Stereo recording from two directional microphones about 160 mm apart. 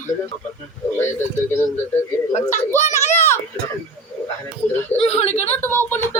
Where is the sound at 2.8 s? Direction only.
45° left (ahead or behind).